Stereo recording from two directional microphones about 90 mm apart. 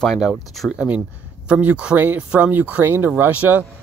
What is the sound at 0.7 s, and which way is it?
A man's voice, 15° right (ahead or behind).